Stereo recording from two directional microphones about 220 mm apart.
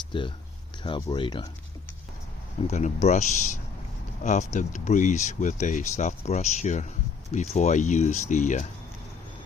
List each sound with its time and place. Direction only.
0.0 s speech: 20° left (ahead or behind)
2.6 s speech: 30° left (ahead or behind)